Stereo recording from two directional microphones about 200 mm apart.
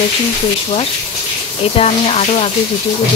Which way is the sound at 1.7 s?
30° left (ahead or behind).